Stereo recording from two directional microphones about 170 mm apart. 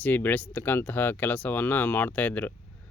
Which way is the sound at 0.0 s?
10° left (ahead or behind).